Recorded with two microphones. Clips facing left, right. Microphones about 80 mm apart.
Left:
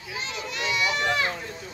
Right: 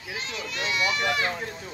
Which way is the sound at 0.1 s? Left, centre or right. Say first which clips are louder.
Left 1 dB; centre.